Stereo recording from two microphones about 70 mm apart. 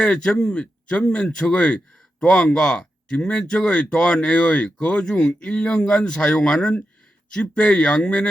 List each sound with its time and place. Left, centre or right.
0.0 s speech: centre